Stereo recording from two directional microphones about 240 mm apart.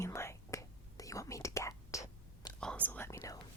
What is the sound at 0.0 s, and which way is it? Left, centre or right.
Whispering, centre.